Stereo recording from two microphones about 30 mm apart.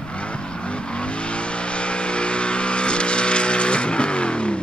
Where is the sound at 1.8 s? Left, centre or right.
Left.